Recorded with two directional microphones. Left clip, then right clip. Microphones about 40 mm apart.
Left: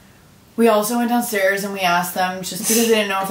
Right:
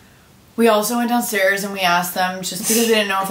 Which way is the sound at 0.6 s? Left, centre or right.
Centre.